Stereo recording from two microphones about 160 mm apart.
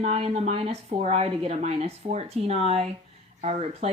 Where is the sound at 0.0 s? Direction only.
40° right (ahead or behind).